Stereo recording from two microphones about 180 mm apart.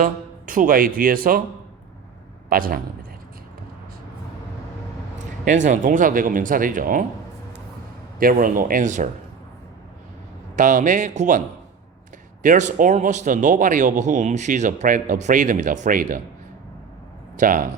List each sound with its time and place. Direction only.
0.0 s speech: 50° right (ahead or behind)
2.5 s a man's voice: 55° right (ahead or behind)
5.5 s a man's voice: 45° right (ahead or behind)
8.2 s a man's voice: 50° right (ahead or behind)
10.5 s a man's voice: 45° right (ahead or behind)
17.3 s a man's voice: 50° right (ahead or behind)